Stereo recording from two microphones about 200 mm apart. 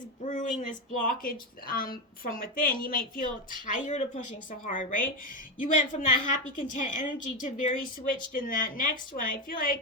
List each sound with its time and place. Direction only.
0.2 s a woman's voice: 40° left (ahead or behind)